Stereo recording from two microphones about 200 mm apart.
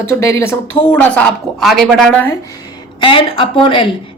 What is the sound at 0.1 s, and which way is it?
Speech, 15° left (ahead or behind).